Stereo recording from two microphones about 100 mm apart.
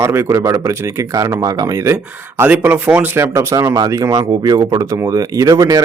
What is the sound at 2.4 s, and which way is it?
Speech, 15° right (ahead or behind).